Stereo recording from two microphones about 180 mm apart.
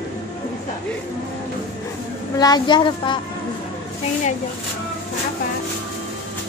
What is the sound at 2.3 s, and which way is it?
Speech, 20° left (ahead or behind).